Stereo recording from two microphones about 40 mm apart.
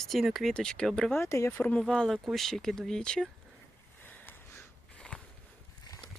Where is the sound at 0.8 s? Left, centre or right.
Left.